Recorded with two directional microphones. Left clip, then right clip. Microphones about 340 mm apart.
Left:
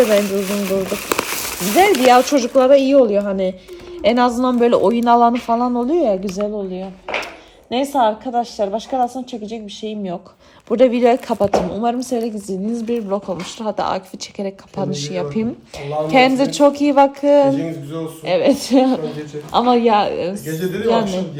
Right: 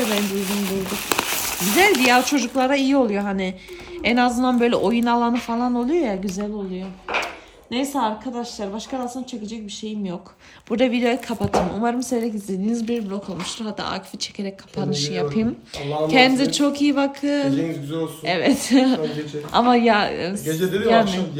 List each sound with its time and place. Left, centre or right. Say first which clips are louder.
0.0 s speech: left 8 dB; centre
8.7 s a woman's voice: left 9 dB; centre
9.3 s speech: left 5 dB; centre
19.5 s speech: left 3 dB; centre